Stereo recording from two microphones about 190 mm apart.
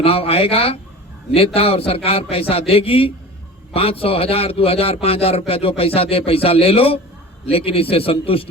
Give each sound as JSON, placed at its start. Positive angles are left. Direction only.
{"t": 0.0, "sound": "a man's voice", "side_deg": 30}